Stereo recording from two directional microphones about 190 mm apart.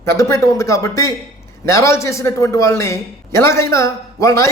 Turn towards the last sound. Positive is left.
turn(degrees=15)  # may be behind; listen again after turning